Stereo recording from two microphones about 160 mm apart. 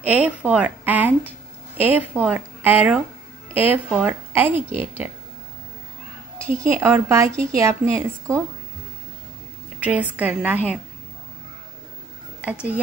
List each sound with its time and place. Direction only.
0.0 s a woman's voice: 10° right (ahead or behind)
6.4 s a woman's voice: 20° right (ahead or behind)
9.8 s a woman's voice: 10° right (ahead or behind)